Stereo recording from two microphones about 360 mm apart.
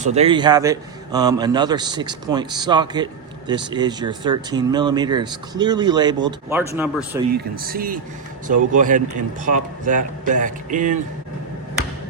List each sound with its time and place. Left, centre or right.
0.0 s a man's voice: centre
7.3 s speech: right